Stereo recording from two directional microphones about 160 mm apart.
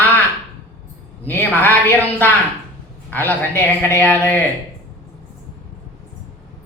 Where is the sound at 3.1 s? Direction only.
10° left (ahead or behind).